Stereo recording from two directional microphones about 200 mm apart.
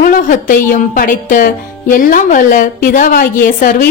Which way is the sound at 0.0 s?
40° left (ahead or behind).